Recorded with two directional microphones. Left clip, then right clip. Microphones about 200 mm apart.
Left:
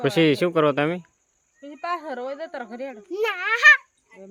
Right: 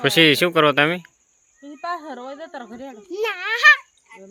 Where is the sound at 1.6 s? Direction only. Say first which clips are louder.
Even; 25° left (ahead or behind).